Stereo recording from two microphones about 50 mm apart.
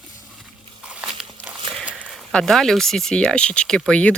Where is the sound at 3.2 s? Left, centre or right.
Left.